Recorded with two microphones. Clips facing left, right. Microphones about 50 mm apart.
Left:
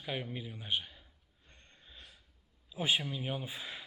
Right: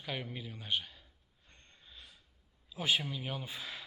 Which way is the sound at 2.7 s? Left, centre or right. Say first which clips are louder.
Even; centre.